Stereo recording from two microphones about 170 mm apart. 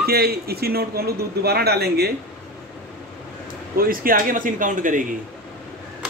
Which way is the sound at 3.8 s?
60° right (ahead or behind).